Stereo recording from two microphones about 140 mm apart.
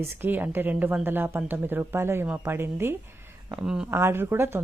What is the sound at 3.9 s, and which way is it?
Speech, 15° right (ahead or behind).